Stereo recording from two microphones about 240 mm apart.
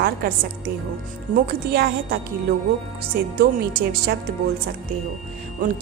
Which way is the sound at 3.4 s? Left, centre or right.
Right.